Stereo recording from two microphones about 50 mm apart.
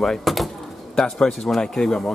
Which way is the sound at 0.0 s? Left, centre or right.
Centre.